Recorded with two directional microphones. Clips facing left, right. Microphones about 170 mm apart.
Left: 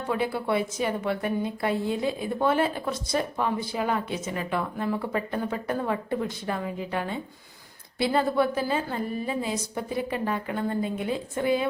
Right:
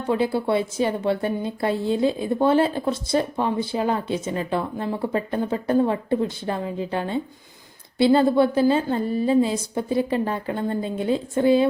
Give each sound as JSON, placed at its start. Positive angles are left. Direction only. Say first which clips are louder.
{"t": 0.1, "sound": "a woman's voice", "louder": "right 5 dB", "side_deg": -30}